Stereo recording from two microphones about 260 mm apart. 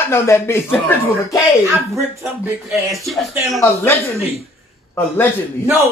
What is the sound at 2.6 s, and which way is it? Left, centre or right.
Speech, centre.